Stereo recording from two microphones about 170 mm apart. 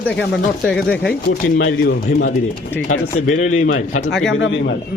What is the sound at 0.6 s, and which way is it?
Speech, 5° left (ahead or behind).